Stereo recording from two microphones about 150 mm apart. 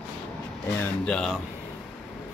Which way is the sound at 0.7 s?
10° left (ahead or behind).